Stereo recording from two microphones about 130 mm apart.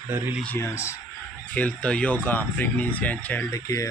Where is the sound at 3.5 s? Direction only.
25° left (ahead or behind).